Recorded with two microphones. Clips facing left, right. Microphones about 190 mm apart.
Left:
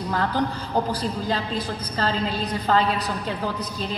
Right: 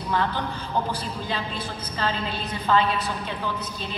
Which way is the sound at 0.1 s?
40° left (ahead or behind).